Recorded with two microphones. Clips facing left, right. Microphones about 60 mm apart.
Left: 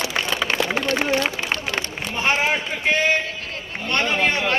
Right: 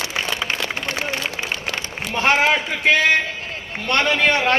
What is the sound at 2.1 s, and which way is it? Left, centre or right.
A man's voice, right.